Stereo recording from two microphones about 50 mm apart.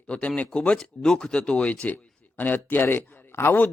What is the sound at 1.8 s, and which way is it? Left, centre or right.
Speech, left.